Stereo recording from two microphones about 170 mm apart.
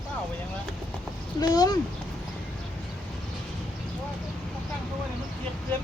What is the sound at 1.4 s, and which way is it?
Speech, 25° left (ahead or behind).